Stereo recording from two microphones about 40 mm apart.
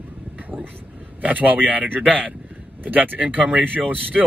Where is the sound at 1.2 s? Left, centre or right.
Right.